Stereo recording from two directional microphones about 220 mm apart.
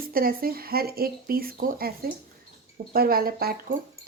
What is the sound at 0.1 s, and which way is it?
Speech, 40° right (ahead or behind).